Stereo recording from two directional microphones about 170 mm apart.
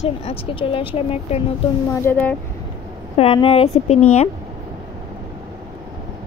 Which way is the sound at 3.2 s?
35° left (ahead or behind).